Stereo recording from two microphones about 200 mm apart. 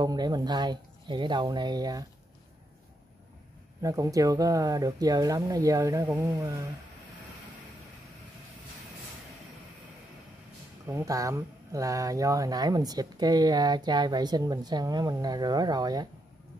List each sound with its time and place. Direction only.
0.0 s speech: 20° right (ahead or behind)
3.8 s speech: 15° right (ahead or behind)
10.9 s speech: 15° right (ahead or behind)